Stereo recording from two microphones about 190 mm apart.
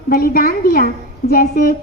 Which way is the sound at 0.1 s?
50° left (ahead or behind).